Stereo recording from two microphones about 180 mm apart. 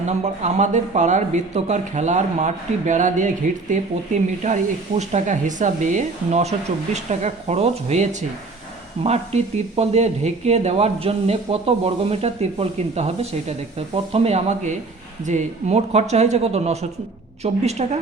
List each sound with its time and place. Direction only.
0.0 s speech: 40° right (ahead or behind)